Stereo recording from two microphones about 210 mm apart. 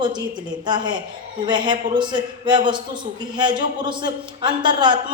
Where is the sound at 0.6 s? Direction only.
20° right (ahead or behind).